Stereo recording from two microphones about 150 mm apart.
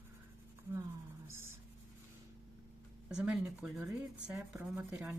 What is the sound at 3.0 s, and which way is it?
Speech, 10° right (ahead or behind).